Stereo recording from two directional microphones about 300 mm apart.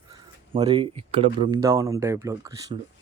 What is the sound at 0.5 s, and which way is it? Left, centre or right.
Speech, centre.